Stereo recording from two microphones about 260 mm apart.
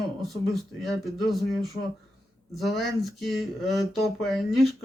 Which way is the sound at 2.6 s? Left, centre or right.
Centre.